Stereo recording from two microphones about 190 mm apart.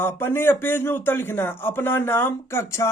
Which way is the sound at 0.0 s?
10° left (ahead or behind).